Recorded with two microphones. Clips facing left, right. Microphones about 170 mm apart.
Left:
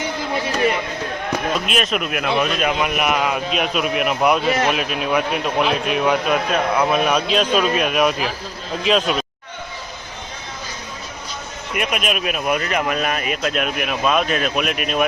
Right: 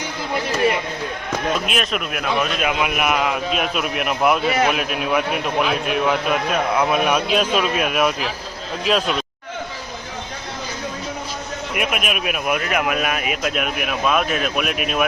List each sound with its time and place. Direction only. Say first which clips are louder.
1.6 s a man's voice: left 2 dB; centre (ahead or behind)
11.7 s speech: left 2 dB; 5° right (ahead or behind)